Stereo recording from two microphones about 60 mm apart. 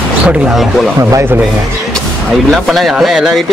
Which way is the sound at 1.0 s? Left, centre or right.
Right.